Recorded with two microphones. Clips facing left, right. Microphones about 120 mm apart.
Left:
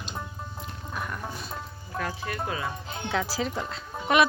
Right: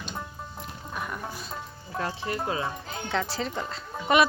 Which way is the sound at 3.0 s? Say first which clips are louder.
Left 1 dB; centre (ahead or behind).